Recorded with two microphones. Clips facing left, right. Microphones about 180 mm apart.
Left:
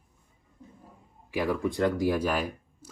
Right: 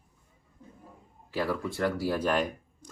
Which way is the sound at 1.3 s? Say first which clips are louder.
Left 3 dB; 15° left (ahead or behind).